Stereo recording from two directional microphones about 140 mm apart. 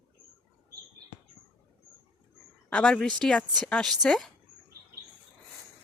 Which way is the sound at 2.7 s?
5° left (ahead or behind).